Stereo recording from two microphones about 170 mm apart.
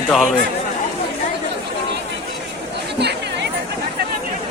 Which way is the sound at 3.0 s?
80° right.